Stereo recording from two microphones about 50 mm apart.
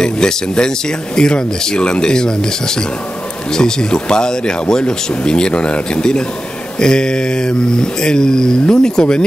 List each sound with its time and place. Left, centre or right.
0.0 s speech: centre